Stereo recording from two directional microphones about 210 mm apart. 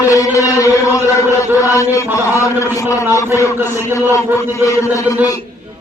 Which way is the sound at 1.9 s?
15° left (ahead or behind).